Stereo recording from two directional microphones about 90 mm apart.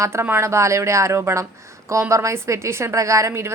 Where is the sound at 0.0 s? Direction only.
30° right (ahead or behind).